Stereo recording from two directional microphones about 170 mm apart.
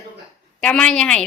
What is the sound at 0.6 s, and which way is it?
Speech, 5° left (ahead or behind).